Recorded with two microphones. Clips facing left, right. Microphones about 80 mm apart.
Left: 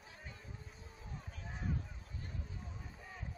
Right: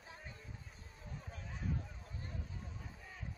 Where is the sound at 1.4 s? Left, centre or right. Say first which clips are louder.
Left 3 dB; left.